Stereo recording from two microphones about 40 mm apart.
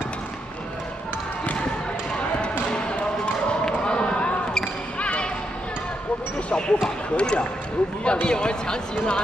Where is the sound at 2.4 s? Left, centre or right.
Left.